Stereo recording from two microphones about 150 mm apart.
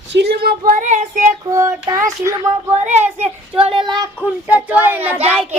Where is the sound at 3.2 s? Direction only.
40° right (ahead or behind).